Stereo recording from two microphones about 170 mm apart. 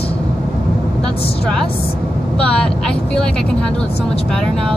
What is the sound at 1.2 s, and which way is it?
Speech, 35° left (ahead or behind).